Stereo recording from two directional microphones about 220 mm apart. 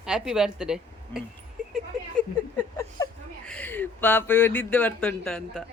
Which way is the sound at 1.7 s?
5° left (ahead or behind).